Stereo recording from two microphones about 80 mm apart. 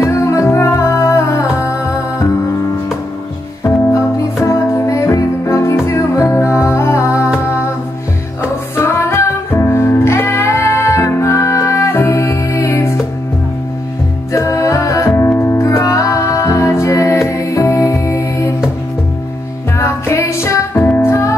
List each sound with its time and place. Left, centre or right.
0.0 s music: left
3.6 s music: left
8.4 s music: left
14.3 s music: left
15.7 s music: left
19.8 s music: left
20.8 s music: left
21.1 s music: left